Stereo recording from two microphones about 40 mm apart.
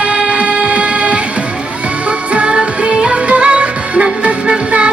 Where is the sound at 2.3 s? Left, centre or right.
Right.